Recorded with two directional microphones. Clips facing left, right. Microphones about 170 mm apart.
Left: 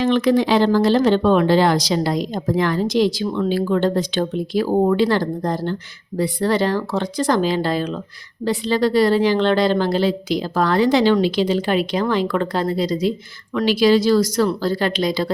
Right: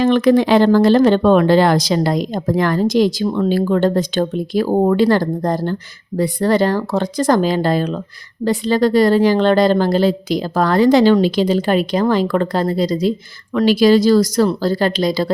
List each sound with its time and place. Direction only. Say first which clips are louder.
0.0 s a woman's voice: right 4 dB; 50° right (ahead or behind)